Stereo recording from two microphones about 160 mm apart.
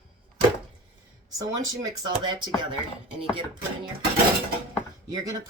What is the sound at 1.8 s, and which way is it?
Speech, 25° right (ahead or behind).